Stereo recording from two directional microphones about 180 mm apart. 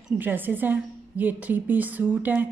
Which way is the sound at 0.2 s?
10° right (ahead or behind).